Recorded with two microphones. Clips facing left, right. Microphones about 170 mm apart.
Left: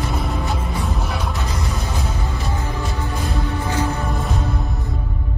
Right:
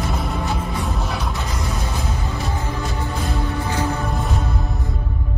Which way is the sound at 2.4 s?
20° left (ahead or behind).